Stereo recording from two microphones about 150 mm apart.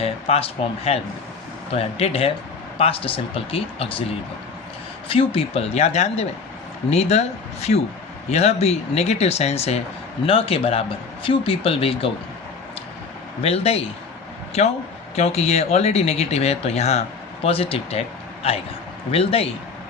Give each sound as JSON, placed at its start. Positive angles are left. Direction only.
{"t": 0.0, "sound": "speech", "side_deg": 40}
{"t": 5.0, "sound": "speech", "side_deg": 40}
{"t": 13.4, "sound": "speech", "side_deg": 40}